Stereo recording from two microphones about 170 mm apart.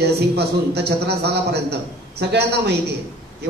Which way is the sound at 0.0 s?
75° right (ahead or behind).